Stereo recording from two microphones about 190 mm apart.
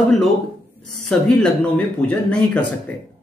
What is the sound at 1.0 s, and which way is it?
Speech, 5° left (ahead or behind).